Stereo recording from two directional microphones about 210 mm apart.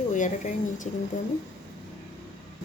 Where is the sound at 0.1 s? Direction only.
35° left (ahead or behind).